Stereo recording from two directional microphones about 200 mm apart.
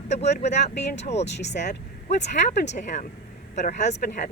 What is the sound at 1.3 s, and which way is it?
Speech, 60° left (ahead or behind).